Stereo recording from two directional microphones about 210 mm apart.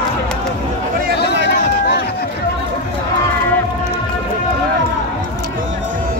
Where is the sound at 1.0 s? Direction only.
55° right (ahead or behind).